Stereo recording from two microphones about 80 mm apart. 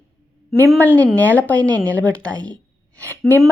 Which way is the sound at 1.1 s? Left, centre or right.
Centre.